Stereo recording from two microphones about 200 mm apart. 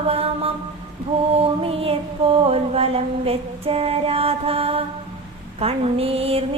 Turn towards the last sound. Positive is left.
turn(degrees=-30)  # may be behind; listen again after turning